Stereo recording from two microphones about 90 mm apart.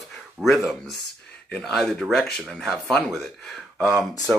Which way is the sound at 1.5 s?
5° left (ahead or behind).